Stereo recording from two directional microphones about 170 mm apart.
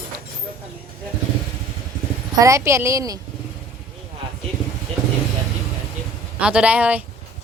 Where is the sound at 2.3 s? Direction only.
20° right (ahead or behind).